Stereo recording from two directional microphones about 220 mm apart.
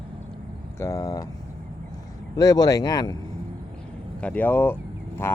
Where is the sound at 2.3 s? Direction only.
15° left (ahead or behind).